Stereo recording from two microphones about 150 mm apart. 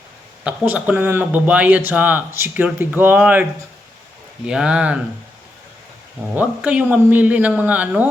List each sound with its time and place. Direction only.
0.4 s speech: 10° right (ahead or behind)
4.4 s speech: 5° right (ahead or behind)
6.3 s speech: 10° right (ahead or behind)